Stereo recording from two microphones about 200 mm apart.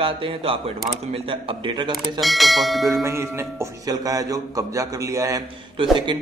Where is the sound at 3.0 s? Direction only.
15° right (ahead or behind).